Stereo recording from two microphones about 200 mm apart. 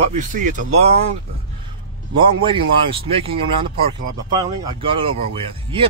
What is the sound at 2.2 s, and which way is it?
Speech, 25° right (ahead or behind).